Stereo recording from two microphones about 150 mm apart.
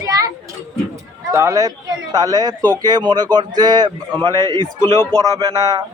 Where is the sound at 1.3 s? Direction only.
20° right (ahead or behind).